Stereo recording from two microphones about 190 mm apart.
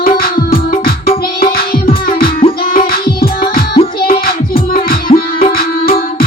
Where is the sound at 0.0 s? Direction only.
50° left (ahead or behind).